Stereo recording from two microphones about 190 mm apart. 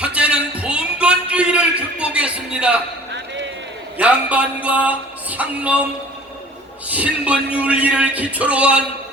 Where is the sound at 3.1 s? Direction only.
70° right (ahead or behind).